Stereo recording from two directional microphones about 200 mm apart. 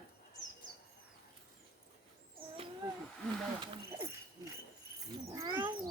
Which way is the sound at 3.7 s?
15° right (ahead or behind).